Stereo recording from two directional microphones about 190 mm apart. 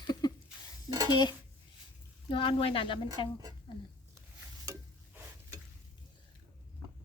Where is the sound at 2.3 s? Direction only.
25° left (ahead or behind).